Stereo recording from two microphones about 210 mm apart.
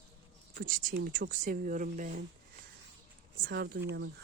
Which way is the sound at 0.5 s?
40° right (ahead or behind).